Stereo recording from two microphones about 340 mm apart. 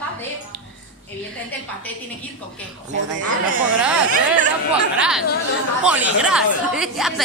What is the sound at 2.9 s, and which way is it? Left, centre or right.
Speech, right.